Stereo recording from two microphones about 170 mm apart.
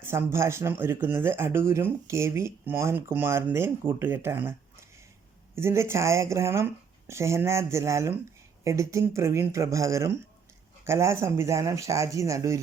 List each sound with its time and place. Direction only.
0.0 s speech: 15° right (ahead or behind)